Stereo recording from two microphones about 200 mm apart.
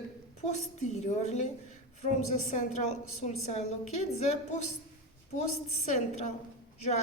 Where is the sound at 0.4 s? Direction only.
35° left (ahead or behind).